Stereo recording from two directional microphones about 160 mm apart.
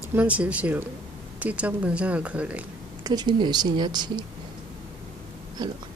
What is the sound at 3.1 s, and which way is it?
A woman's voice, 25° right (ahead or behind).